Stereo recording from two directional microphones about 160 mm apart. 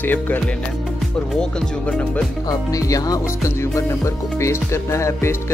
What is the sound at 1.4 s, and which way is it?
Speech, 5° left (ahead or behind).